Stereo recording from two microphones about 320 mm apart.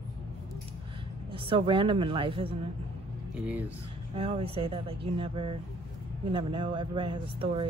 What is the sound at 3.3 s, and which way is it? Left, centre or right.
Speech, centre.